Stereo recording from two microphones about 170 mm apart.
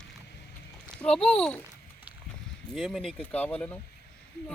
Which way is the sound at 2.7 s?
Centre (ahead or behind).